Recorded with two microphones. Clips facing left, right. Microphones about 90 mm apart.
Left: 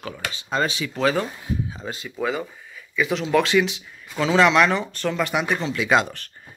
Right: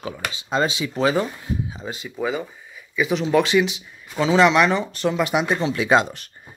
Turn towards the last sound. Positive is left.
turn(degrees=-20)  # may be behind; listen again after turning